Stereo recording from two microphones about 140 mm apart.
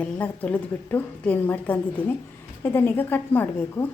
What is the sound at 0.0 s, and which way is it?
A woman's voice, 10° left (ahead or behind).